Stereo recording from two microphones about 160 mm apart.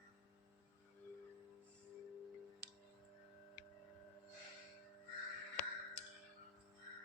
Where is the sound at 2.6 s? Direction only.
90° right.